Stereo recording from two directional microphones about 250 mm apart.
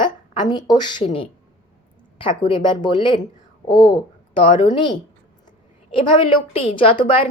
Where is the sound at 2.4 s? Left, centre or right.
Centre.